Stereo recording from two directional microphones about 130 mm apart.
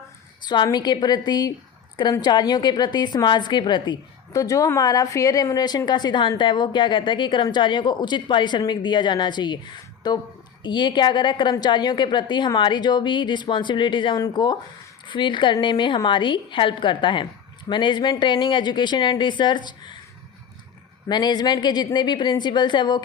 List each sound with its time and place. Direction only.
0.4 s a woman's voice: 35° left (ahead or behind)
21.1 s a woman's voice: 35° left (ahead or behind)